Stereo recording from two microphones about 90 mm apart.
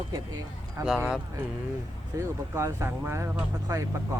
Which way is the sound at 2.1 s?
30° right (ahead or behind).